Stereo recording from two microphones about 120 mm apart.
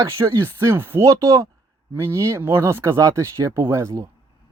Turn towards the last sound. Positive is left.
turn(degrees=-20)  # may be behind; listen again after turning